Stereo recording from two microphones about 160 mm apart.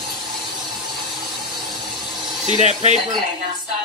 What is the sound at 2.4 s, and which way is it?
Speech, 45° right (ahead or behind).